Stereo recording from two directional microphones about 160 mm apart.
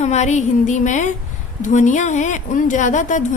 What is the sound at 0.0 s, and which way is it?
Speech, 45° left (ahead or behind).